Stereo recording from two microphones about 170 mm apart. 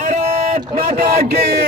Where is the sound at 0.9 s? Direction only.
70° right (ahead or behind).